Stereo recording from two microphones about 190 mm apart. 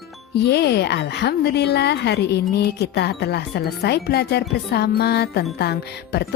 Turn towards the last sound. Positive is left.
turn(degrees=60)  # may be behind; listen again after turning